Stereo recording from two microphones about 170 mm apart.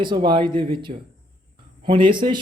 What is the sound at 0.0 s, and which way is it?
Speech, 30° right (ahead or behind).